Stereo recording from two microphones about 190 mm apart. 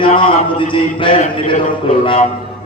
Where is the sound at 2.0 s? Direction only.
30° left (ahead or behind).